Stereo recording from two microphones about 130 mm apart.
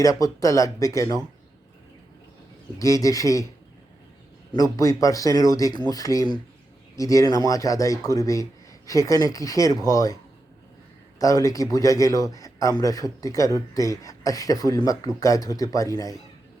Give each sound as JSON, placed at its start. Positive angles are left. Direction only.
{"t": 0.0, "sound": "a man's voice", "side_deg": 25}
{"t": 2.7, "sound": "a man's voice", "side_deg": 25}
{"t": 4.5, "sound": "a man's voice", "side_deg": 25}
{"t": 11.2, "sound": "a man's voice", "side_deg": 25}